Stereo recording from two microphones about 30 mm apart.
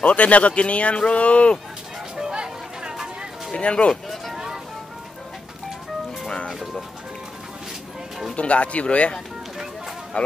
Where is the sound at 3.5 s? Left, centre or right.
Left.